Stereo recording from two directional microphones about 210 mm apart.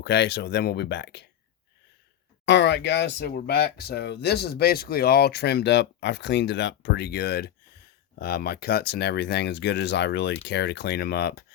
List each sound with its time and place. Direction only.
0.0 s speech: 50° left (ahead or behind)
2.5 s speech: 55° left (ahead or behind)